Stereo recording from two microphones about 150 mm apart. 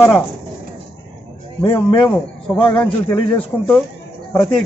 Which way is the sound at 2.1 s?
10° left (ahead or behind).